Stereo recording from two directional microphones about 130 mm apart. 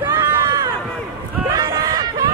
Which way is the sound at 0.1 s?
25° right (ahead or behind).